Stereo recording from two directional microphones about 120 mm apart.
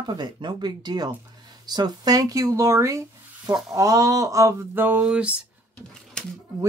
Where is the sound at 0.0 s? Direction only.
40° right (ahead or behind); by 5.3 s 10° right (ahead or behind).